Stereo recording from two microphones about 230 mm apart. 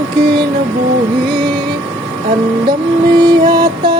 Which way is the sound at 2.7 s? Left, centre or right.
Centre.